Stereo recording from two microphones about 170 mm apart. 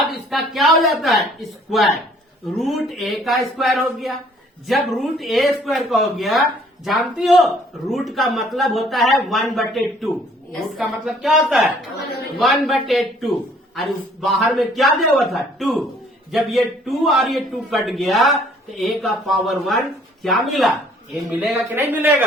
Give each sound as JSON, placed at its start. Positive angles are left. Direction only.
{"t": 0.1, "sound": "speech", "side_deg": 0}
{"t": 2.6, "sound": "a man's voice", "side_deg": 0}
{"t": 21.8, "sound": "a woman's voice", "side_deg": -10}